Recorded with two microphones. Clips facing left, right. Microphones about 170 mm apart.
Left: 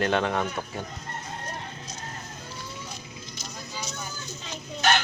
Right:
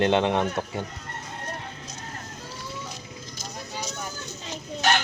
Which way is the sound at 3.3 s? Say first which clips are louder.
Right 3 dB; 50° right (ahead or behind).